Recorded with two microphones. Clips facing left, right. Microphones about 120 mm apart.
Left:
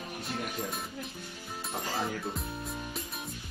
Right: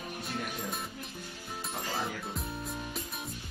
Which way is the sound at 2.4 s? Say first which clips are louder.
Even; centre (ahead or behind).